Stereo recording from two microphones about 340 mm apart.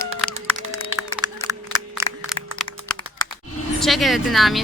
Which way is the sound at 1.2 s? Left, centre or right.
Centre.